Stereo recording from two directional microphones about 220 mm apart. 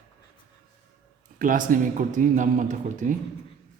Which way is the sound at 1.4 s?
40° right (ahead or behind).